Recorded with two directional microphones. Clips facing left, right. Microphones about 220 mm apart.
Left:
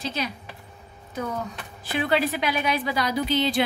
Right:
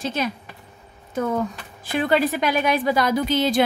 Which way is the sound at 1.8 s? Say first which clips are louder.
Right 4 dB; 45° right (ahead or behind).